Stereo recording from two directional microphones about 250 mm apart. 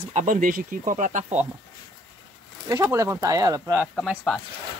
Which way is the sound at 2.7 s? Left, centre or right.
Centre.